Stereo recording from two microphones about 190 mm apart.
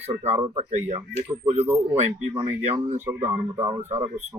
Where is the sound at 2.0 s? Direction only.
35° right (ahead or behind).